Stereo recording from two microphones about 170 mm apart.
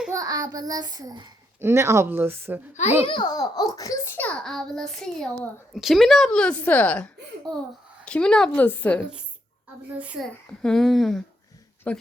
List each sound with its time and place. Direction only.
0.1 s child singing: 20° right (ahead or behind)
1.6 s speech: 15° right (ahead or behind)
3.1 s a child's voice: 25° left (ahead or behind); by 9.0 s 10° left (ahead or behind)
10.6 s a child's voice: centre (ahead or behind)